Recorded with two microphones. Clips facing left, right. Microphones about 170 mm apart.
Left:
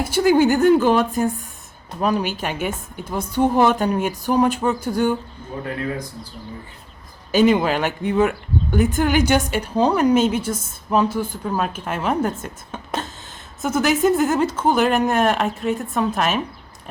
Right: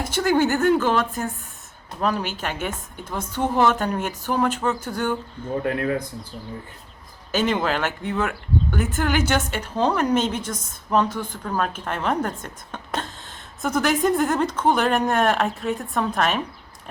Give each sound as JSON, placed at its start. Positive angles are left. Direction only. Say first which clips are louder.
{"t": 0.0, "sound": "speech", "louder": "left 4 dB", "side_deg": 10}
{"t": 5.6, "sound": "speech", "louder": "right 3 dB", "side_deg": -60}
{"t": 7.3, "sound": "speech", "louder": "left 6 dB", "side_deg": 10}